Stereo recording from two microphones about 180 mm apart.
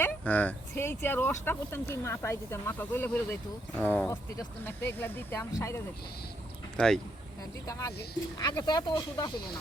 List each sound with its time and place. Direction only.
0.0 s speech: 10° left (ahead or behind)
6.7 s speech: 5° left (ahead or behind)
7.7 s speech: 15° left (ahead or behind)